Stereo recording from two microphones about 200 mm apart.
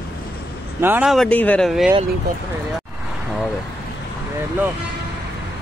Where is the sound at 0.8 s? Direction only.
5° right (ahead or behind).